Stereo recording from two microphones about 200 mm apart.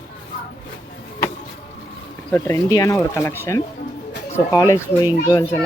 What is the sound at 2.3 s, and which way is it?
A child's voice, 15° left (ahead or behind).